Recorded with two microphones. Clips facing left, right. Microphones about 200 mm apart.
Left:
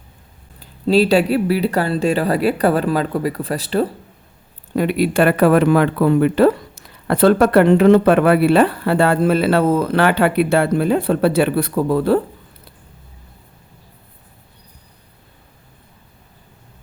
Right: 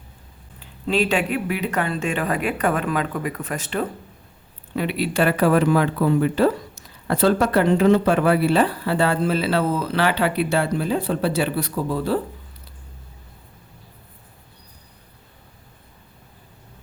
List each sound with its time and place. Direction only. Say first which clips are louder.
0.6 s speech: left 7 dB; 35° left (ahead or behind)
4.7 s speech: left 6 dB; 45° left (ahead or behind)